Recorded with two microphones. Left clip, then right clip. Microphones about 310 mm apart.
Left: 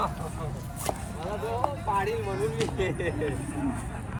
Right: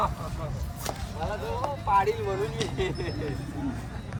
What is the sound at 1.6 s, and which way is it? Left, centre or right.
Vehicle, left.